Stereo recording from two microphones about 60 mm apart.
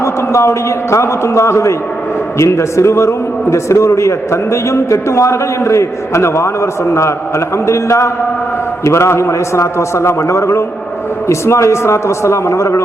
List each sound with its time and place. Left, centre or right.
0.0 s a man's voice: left